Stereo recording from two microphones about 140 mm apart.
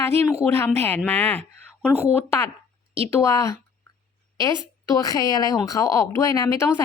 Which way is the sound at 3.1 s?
20° left (ahead or behind).